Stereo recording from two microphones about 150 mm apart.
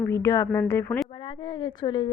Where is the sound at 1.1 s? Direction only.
30° left (ahead or behind).